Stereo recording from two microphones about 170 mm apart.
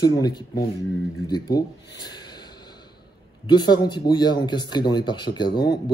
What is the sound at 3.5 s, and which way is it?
Speech, 25° left (ahead or behind).